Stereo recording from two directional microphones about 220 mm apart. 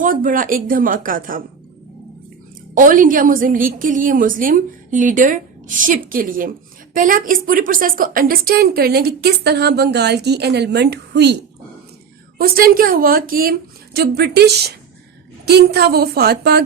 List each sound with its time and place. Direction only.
0.0 s a woman's voice: 40° right (ahead or behind)
2.7 s a woman's voice: 35° right (ahead or behind)
12.4 s a woman's voice: 40° right (ahead or behind)